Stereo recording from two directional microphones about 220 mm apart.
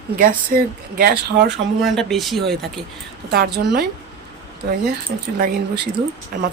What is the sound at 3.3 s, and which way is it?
Speech, 45° right (ahead or behind).